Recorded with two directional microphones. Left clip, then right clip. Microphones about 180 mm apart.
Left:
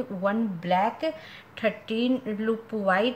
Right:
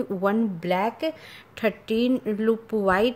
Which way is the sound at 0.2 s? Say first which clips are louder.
Right 2 dB; 60° right (ahead or behind).